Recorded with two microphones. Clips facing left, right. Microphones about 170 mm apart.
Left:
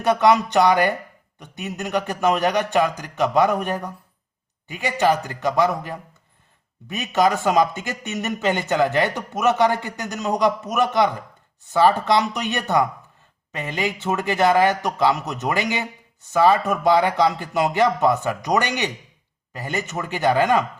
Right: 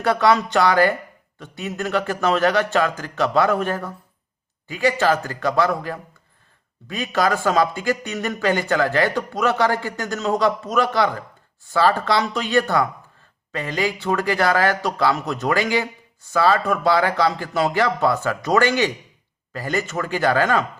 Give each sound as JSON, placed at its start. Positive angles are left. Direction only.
{"t": 0.0, "sound": "a man's voice", "side_deg": 20}